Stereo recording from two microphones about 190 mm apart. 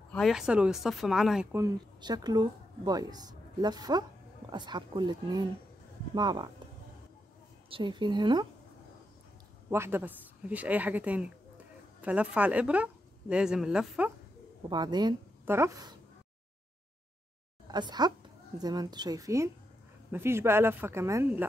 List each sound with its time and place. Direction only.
0.1 s speech: centre (ahead or behind)
1.5 s speech: 20° right (ahead or behind)
7.7 s speech: 25° right (ahead or behind)
9.7 s speech: 10° right (ahead or behind)
14.7 s a woman's voice: 20° right (ahead or behind)
17.6 s a woman's voice: 20° right (ahead or behind)